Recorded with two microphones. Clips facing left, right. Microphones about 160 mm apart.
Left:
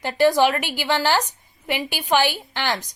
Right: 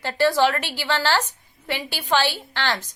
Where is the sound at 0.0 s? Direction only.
15° left (ahead or behind).